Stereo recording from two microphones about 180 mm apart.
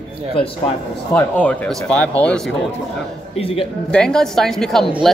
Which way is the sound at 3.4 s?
30° left (ahead or behind).